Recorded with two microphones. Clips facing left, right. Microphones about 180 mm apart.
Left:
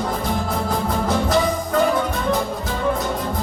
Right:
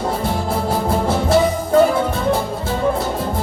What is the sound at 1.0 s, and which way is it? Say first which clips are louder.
Music: right 3 dB; 30° right (ahead or behind).